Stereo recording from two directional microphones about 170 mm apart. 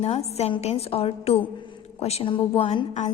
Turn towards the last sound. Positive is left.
turn(degrees=40)  # may be behind; listen again after turning